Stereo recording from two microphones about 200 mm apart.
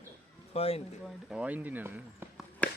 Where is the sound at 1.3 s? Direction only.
10° right (ahead or behind).